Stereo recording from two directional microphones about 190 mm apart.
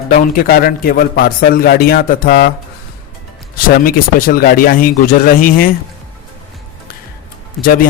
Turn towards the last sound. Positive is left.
turn(degrees=45)  # may be behind; listen again after turning